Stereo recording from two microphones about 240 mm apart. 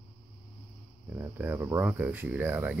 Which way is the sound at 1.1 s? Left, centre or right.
Centre.